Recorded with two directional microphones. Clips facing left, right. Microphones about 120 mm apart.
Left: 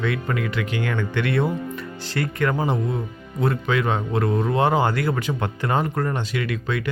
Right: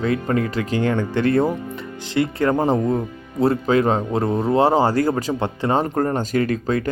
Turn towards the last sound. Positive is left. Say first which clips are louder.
# right 5 dB
turn(degrees=-40)  # may be behind; listen again after turning